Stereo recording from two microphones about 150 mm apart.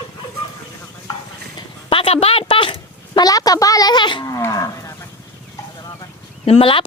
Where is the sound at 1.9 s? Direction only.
40° left (ahead or behind); by 4.9 s 20° left (ahead or behind).